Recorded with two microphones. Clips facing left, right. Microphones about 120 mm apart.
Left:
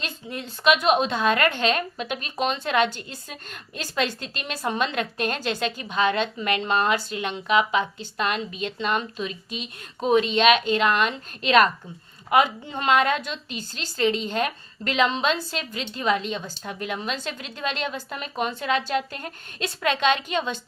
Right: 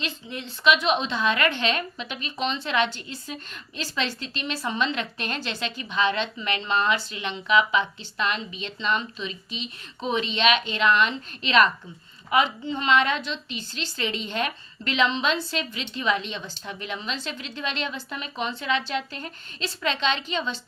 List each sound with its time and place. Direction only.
0.0 s a woman's voice: 45° left (ahead or behind)